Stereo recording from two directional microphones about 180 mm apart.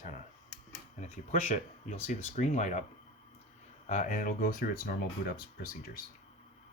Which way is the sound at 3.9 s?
45° left (ahead or behind).